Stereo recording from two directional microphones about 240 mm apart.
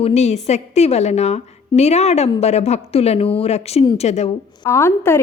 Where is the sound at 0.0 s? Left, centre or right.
Left.